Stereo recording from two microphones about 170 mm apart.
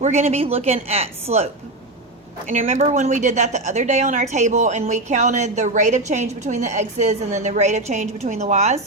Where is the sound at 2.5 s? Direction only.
45° right (ahead or behind).